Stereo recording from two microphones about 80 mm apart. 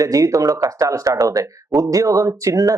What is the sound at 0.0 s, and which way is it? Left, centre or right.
Speech, right.